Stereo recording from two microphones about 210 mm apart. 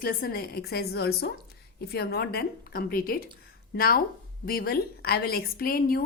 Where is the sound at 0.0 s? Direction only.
45° left (ahead or behind).